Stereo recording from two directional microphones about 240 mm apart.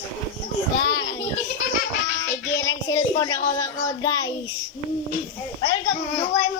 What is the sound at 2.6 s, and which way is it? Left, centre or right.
Speech, centre.